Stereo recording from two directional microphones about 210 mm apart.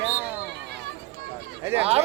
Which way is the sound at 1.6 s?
10° right (ahead or behind).